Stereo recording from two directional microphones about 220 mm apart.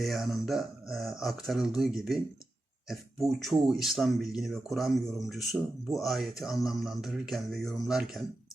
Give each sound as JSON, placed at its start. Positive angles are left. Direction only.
{"t": 0.0, "sound": "speech", "side_deg": 0}